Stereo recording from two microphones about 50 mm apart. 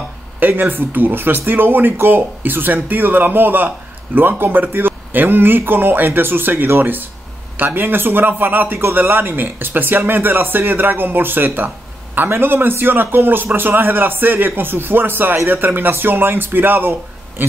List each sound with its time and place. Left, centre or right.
0.4 s speech: right